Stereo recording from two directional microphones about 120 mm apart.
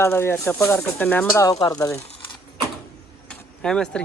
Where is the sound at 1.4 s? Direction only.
30° left (ahead or behind).